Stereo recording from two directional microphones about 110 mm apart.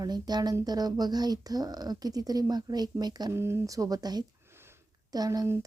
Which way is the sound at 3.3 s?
25° right (ahead or behind).